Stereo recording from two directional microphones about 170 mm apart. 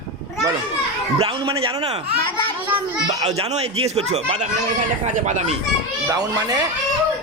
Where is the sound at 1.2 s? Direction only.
30° right (ahead or behind).